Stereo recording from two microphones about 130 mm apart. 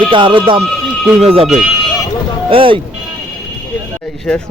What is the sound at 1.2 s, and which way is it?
Speech, 50° right (ahead or behind).